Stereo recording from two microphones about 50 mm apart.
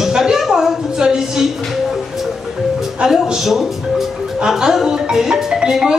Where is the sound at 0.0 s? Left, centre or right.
Centre.